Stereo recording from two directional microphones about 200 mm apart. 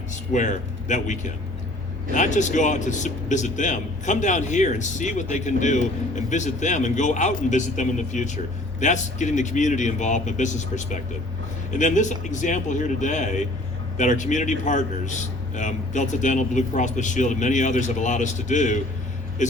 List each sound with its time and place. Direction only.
0.1 s a man's voice: 35° left (ahead or behind)